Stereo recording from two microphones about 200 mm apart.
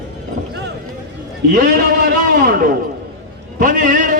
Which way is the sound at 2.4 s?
45° right (ahead or behind).